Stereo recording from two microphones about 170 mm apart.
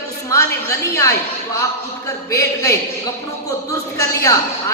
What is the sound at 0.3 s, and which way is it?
Speech, 20° left (ahead or behind).